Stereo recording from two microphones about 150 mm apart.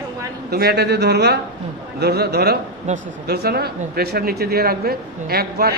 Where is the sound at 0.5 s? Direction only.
90° right.